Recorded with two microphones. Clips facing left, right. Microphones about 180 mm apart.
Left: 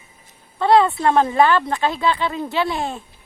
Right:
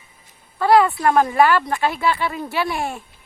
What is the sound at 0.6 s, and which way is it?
Speech, 25° left (ahead or behind).